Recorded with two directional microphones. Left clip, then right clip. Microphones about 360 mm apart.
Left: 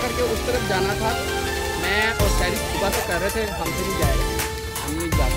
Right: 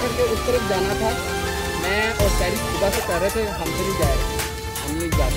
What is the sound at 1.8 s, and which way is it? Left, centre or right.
Music, centre.